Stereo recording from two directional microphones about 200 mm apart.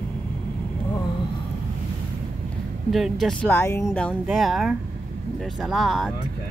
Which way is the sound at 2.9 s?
Centre (ahead or behind).